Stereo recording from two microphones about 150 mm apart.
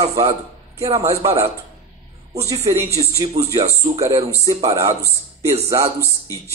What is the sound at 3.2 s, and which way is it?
Speech, 45° right (ahead or behind).